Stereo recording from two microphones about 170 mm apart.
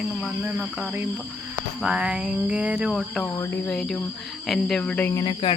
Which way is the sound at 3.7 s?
5° left (ahead or behind).